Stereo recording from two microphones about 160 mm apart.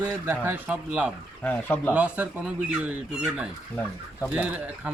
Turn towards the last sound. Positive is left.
turn(degrees=-10)  # may be behind; listen again after turning